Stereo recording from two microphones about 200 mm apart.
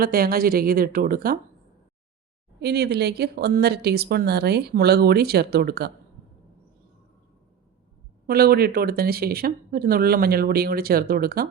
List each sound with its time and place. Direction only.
0.0 s a woman's voice: 50° right (ahead or behind)
2.6 s a woman's voice: 55° right (ahead or behind)
8.3 s a woman's voice: 50° right (ahead or behind)